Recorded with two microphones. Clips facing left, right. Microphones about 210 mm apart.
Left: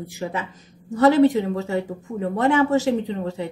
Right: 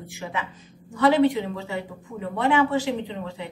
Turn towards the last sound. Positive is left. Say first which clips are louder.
# left 6 dB
turn(degrees=45)  # may be behind; listen again after turning